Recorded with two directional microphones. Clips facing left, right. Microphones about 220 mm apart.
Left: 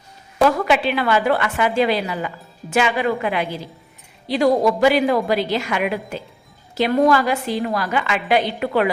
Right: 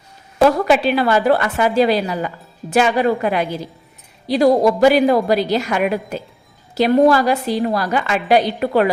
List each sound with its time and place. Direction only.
0.4 s a woman's voice: 35° right (ahead or behind)